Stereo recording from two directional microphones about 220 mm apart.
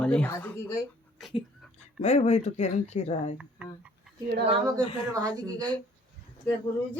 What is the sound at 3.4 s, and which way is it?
Speech, 5° right (ahead or behind).